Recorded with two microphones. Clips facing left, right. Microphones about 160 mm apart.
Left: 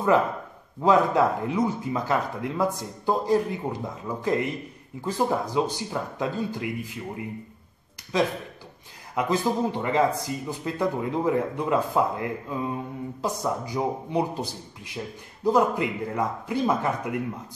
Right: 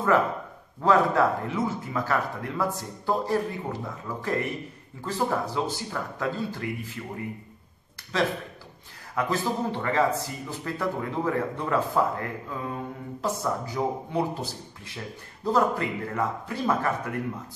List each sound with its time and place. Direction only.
0.7 s speech: 15° left (ahead or behind)
8.1 s speech: 15° left (ahead or behind)